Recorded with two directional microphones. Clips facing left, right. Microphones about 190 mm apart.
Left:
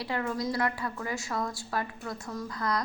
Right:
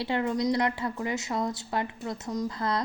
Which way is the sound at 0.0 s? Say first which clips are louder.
Right 4 dB; 25° right (ahead or behind).